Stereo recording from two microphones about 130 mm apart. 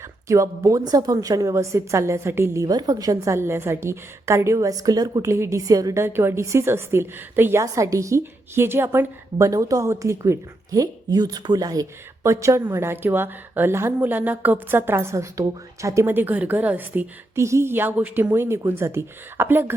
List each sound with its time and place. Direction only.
0.3 s a woman's voice: 25° right (ahead or behind)